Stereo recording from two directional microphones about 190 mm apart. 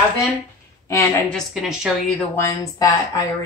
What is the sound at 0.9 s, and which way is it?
A woman's voice, 10° left (ahead or behind).